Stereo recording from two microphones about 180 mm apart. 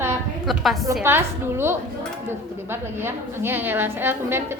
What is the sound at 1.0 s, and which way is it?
A woman's voice, 15° right (ahead or behind).